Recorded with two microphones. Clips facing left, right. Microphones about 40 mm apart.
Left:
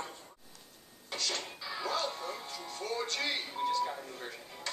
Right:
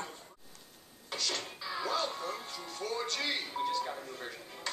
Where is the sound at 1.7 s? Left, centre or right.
Centre.